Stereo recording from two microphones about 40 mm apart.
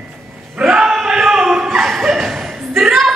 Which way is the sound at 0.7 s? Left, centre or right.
Centre.